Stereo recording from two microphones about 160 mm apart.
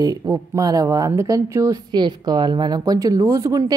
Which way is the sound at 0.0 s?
25° right (ahead or behind).